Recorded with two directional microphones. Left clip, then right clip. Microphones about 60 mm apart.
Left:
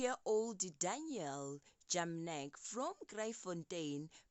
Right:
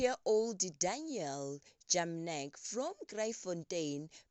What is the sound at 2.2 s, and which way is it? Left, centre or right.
Speech, right.